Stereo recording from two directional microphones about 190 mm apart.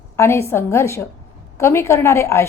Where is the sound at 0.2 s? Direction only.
15° left (ahead or behind).